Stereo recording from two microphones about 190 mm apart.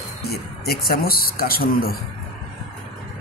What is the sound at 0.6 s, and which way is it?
Speech, 55° left (ahead or behind).